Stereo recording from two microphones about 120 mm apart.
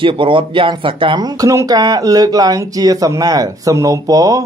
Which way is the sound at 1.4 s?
25° right (ahead or behind).